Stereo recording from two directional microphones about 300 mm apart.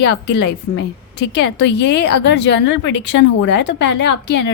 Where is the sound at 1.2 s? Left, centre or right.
Left.